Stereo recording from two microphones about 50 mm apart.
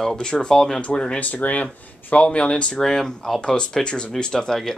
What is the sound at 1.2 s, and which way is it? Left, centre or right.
Speech, left.